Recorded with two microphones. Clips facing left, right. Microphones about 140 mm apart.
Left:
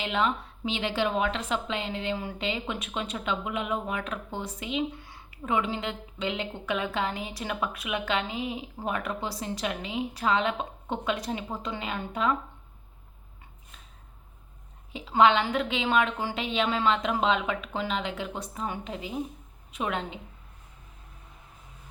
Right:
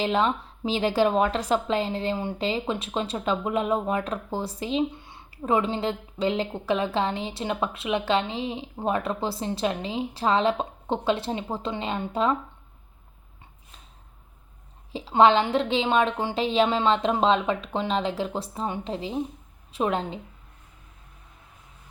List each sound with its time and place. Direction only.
0.0 s a woman's voice: 35° right (ahead or behind)
14.9 s a woman's voice: 30° right (ahead or behind)